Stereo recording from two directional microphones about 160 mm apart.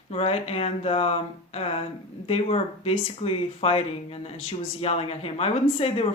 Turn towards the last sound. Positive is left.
turn(degrees=35)  # may be behind; listen again after turning